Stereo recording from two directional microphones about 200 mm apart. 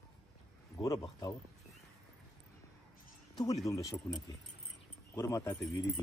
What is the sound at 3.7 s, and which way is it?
Speech, 15° left (ahead or behind).